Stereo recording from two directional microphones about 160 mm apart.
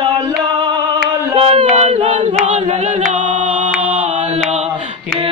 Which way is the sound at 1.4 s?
35° right (ahead or behind).